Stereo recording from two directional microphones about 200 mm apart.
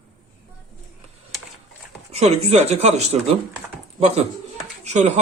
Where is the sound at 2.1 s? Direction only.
30° right (ahead or behind).